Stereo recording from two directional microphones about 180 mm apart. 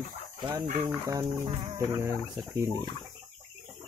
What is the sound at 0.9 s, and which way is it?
Speech, 15° right (ahead or behind).